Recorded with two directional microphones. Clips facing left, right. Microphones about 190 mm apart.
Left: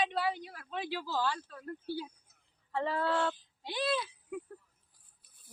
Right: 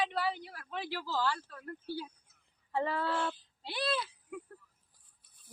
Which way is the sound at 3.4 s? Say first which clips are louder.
Left 2 dB; 15° left (ahead or behind).